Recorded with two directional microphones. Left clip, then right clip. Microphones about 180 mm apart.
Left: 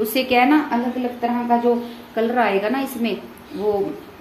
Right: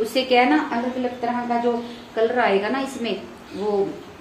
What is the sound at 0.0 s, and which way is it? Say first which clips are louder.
Speech: left 1 dB; 45° left (ahead or behind).